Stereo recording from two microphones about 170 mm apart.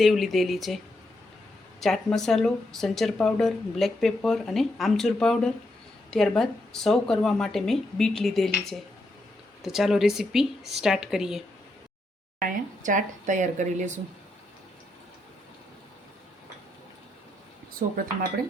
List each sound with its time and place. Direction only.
0.0 s speech: centre (ahead or behind)
1.8 s speech: centre (ahead or behind)
9.6 s speech: centre (ahead or behind)
12.4 s speech: 50° right (ahead or behind)